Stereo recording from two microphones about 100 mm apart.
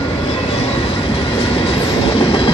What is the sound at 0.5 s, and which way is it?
Train, 85° left.